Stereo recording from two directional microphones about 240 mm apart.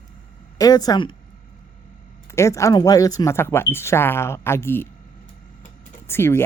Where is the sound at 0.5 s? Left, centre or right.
Centre.